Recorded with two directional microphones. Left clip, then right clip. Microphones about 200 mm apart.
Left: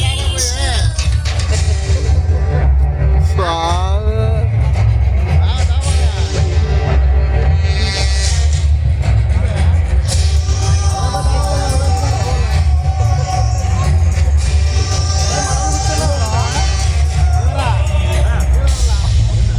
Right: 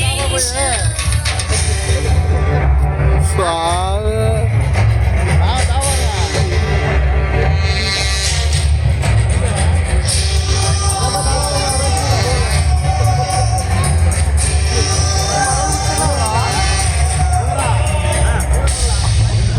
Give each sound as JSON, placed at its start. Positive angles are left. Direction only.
{"t": 3.3, "sound": "a sound", "side_deg": -15}
{"t": 6.3, "sound": "music", "side_deg": -15}
{"t": 10.6, "sound": "music", "side_deg": -40}
{"t": 14.8, "sound": "music", "side_deg": -55}